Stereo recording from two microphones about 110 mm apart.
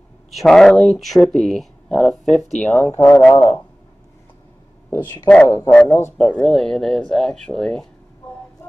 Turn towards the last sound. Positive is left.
turn(degrees=5)  # may be behind; listen again after turning